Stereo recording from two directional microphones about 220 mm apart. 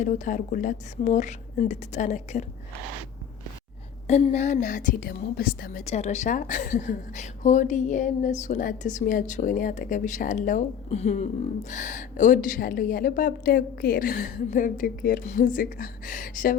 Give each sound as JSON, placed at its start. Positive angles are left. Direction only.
{"t": 0.0, "sound": "a woman's voice", "side_deg": 35}
{"t": 4.0, "sound": "a woman's voice", "side_deg": 30}
{"t": 5.8, "sound": "a woman's voice", "side_deg": 30}